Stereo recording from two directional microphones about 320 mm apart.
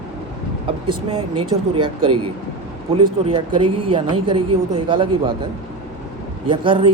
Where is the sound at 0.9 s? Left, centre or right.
Centre.